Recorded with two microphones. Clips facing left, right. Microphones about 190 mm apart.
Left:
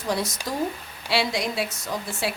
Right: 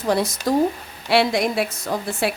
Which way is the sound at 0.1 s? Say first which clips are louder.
Right 8 dB; 60° right (ahead or behind).